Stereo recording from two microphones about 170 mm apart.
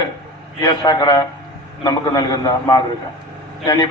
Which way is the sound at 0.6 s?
25° left (ahead or behind).